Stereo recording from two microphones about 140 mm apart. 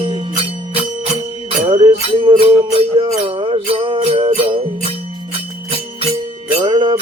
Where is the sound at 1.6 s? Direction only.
40° right (ahead or behind).